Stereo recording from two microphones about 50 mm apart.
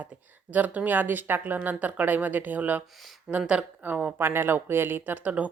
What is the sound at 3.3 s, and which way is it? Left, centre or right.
Speech, centre.